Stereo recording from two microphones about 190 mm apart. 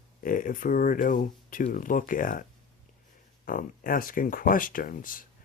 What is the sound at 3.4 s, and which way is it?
Speech, 45° left (ahead or behind).